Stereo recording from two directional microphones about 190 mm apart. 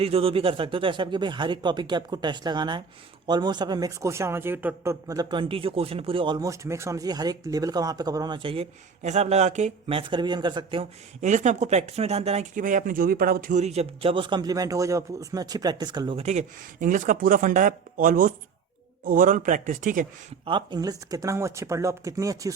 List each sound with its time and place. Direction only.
0.0 s speech: 30° right (ahead or behind)
11.2 s speech: 40° right (ahead or behind)
20.4 s speech: 25° right (ahead or behind)